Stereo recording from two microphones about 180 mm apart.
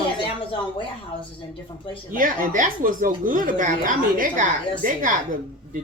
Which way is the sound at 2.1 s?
50° right (ahead or behind).